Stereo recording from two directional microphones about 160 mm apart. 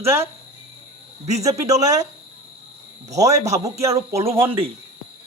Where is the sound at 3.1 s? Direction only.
20° right (ahead or behind).